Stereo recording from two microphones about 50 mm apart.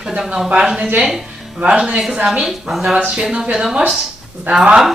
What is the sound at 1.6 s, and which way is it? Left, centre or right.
Speech, right.